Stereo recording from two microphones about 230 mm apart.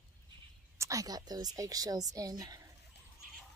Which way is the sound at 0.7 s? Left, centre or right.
Centre.